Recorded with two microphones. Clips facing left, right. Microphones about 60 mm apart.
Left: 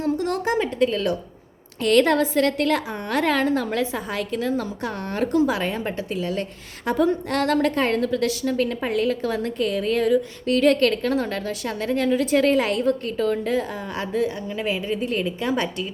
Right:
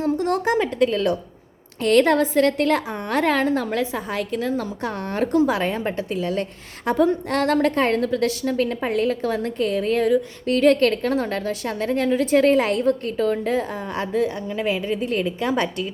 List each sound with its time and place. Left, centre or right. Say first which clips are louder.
0.0 s a sound: right 2 dB; right
0.3 s a woman's voice: right 2 dB; right
1.8 s a woman's voice: right 1 dB; right
4.8 s a woman's voice: right 1 dB; right
5.5 s a woman's voice: right 2 dB; right
6.9 s a woman's voice: right 1 dB; right